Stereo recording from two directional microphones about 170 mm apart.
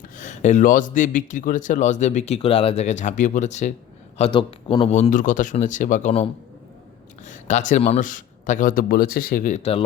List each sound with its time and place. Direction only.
0.2 s a man's voice: 45° left (ahead or behind)
4.2 s a man's voice: 30° left (ahead or behind)
5.1 s a man's voice: 50° left (ahead or behind)
7.3 s a man's voice: 45° left (ahead or behind)